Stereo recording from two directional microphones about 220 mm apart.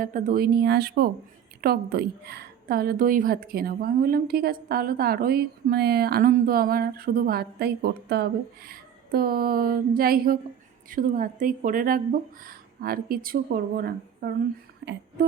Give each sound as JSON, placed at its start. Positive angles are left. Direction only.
{"t": 0.0, "sound": "a woman's voice", "side_deg": -40}